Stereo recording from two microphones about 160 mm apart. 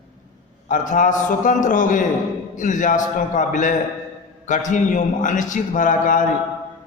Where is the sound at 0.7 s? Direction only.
55° left (ahead or behind).